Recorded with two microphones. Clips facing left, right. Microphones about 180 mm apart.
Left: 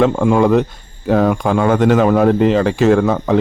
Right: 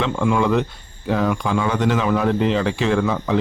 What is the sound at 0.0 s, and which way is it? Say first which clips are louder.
Speech: left 7 dB; 45° left (ahead or behind).